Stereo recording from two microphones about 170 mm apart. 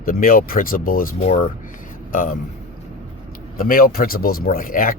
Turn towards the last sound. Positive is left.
turn(degrees=55)  # may be behind; listen again after turning